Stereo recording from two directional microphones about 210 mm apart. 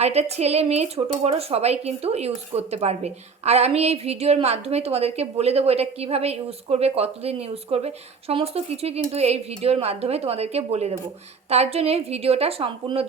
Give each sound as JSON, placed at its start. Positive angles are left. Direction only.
{"t": 0.0, "sound": "a woman's voice", "side_deg": -30}